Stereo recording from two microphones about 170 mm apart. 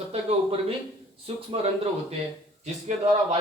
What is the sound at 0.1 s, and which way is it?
A man's voice, 35° right (ahead or behind).